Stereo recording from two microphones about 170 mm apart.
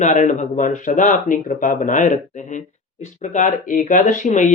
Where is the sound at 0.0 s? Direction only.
45° left (ahead or behind).